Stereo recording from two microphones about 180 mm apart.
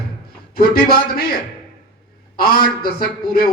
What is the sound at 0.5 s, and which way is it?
Speech, 55° left (ahead or behind).